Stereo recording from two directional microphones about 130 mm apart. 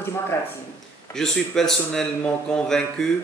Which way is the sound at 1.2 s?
5° left (ahead or behind).